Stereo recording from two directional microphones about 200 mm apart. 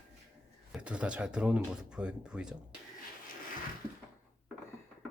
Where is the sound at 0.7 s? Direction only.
5° right (ahead or behind).